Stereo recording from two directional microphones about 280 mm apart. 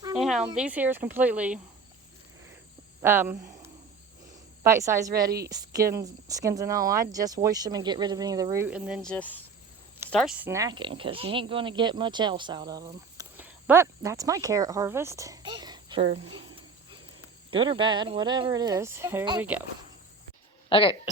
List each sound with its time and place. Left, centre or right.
0.2 s a sound: centre
0.5 s speech: centre
3.0 s speech: centre
17.5 s speech: centre
20.7 s speech: centre